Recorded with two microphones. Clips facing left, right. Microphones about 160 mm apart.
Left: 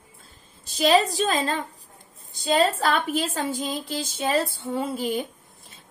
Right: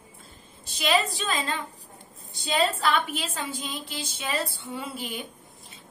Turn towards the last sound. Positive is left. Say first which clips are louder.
# left 8 dB
turn(degrees=40)  # may be behind; listen again after turning